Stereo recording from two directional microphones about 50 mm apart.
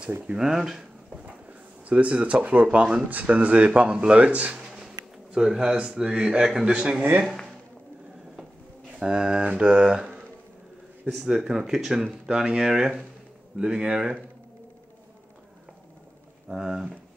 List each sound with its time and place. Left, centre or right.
0.4 s speech: centre
1.9 s speech: right
4.6 s speech: centre
9.0 s speech: centre
11.1 s speech: centre
13.6 s speech: centre
16.4 s speech: centre